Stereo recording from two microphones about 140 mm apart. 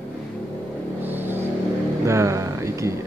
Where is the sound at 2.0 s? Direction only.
20° right (ahead or behind).